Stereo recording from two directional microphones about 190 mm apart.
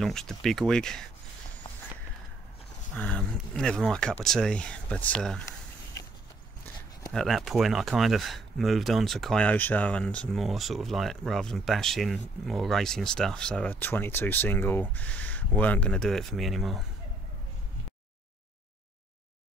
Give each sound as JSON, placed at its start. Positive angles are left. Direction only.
{"t": 0.0, "sound": "speech", "side_deg": 5}
{"t": 3.0, "sound": "speech", "side_deg": 5}
{"t": 7.1, "sound": "speech", "side_deg": 0}